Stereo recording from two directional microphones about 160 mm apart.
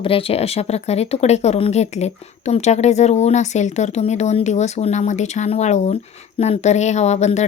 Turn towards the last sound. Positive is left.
turn(degrees=45)  # may be behind; listen again after turning